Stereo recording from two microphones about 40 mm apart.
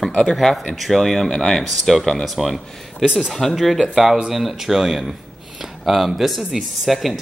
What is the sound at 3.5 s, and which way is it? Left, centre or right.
Speech, centre.